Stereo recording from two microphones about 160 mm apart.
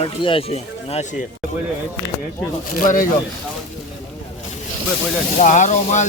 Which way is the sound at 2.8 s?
55° left (ahead or behind).